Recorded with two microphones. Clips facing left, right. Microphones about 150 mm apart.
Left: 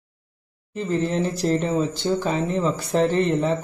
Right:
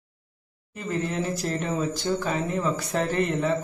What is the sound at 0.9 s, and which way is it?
A man's voice, 35° left (ahead or behind).